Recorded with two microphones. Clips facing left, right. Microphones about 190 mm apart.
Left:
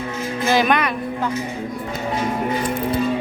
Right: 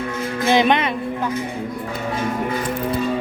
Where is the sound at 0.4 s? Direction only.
25° right (ahead or behind).